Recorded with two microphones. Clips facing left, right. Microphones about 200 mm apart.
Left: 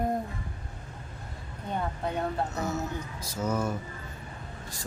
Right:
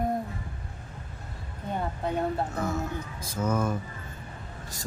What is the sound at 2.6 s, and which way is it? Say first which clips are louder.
Speech: right 1 dB; 50° right (ahead or behind).